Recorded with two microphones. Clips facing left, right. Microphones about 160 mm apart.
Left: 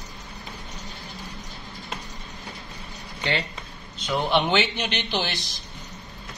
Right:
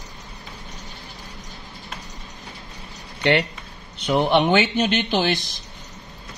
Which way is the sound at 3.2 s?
70° right (ahead or behind).